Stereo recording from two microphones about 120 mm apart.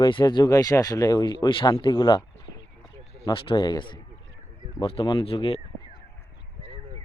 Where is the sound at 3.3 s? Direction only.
45° left (ahead or behind).